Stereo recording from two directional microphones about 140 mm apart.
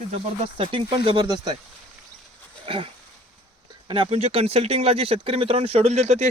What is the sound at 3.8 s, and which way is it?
Speech, 40° right (ahead or behind).